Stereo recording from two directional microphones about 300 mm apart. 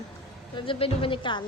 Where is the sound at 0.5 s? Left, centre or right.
Centre.